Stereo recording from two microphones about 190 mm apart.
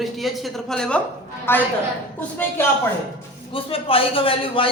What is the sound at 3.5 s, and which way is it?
A man's voice, 30° left (ahead or behind).